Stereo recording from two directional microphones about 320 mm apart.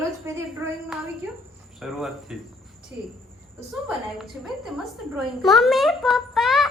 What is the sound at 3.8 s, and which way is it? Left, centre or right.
A man's voice, centre.